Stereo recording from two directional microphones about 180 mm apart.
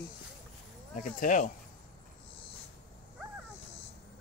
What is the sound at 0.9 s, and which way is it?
Speech, 45° left (ahead or behind).